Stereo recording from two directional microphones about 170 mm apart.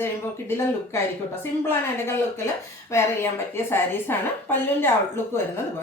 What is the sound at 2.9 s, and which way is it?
A woman's voice, 15° left (ahead or behind).